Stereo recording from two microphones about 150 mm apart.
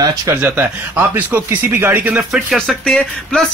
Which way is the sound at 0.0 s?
25° right (ahead or behind).